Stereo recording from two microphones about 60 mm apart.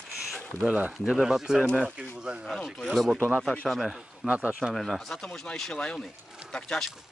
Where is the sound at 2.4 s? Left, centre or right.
Centre.